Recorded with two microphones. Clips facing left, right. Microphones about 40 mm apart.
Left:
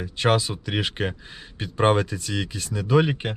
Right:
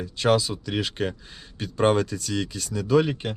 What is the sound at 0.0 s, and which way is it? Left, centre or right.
Speech, left.